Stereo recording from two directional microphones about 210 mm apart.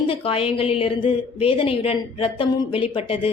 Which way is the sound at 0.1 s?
25° left (ahead or behind).